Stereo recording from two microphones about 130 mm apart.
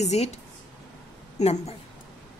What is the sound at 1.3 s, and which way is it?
Speech, 60° left (ahead or behind).